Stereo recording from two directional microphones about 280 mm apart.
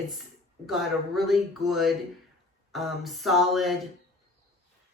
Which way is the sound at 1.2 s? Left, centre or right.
Centre.